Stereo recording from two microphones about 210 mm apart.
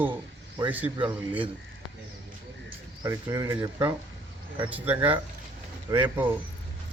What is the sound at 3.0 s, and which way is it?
Speech, 15° right (ahead or behind).